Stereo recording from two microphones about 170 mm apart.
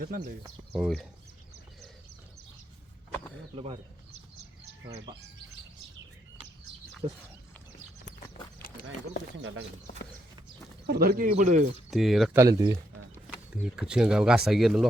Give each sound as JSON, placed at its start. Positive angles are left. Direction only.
{"t": 0.0, "sound": "speech", "side_deg": -65}
{"t": 0.7, "sound": "speech", "side_deg": 0}
{"t": 3.5, "sound": "speech", "side_deg": -35}
{"t": 5.1, "sound": "speech", "side_deg": -30}
{"t": 10.8, "sound": "speech", "side_deg": -65}
{"t": 11.9, "sound": "speech", "side_deg": 0}
{"t": 12.3, "sound": "speech", "side_deg": -20}
{"t": 13.5, "sound": "speech", "side_deg": -5}